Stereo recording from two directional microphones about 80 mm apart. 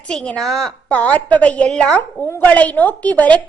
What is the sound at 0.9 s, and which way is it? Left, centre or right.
A woman's voice, centre.